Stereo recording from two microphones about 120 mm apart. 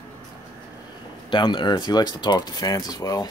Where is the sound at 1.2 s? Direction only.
40° left (ahead or behind).